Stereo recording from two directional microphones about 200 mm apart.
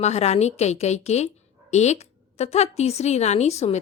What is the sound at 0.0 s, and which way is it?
A woman's voice, 35° left (ahead or behind).